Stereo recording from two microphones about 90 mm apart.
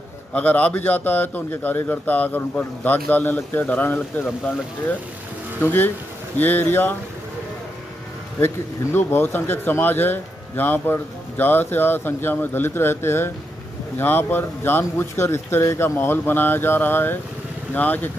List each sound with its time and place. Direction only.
0.3 s a man's voice: 20° left (ahead or behind)
5.6 s a man's voice: 25° left (ahead or behind)
8.9 s a man's voice: 25° left (ahead or behind)